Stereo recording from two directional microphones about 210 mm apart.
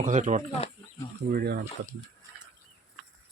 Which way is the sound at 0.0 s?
35° right (ahead or behind).